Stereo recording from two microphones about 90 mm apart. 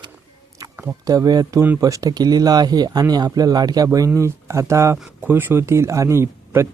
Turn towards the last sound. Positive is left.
turn(degrees=-30)  # may be behind; listen again after turning